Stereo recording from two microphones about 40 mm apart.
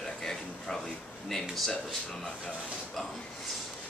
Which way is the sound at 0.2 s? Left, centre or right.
Centre.